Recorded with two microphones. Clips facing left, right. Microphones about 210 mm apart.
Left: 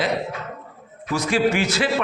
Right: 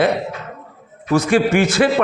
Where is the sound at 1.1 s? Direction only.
55° right (ahead or behind).